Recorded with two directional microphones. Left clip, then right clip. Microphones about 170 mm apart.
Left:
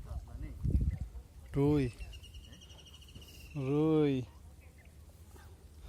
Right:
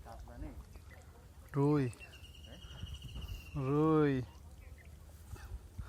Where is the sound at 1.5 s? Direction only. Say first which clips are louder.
Left 2 dB; 40° left (ahead or behind).